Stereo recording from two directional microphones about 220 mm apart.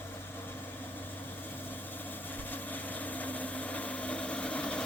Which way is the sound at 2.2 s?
10° left (ahead or behind).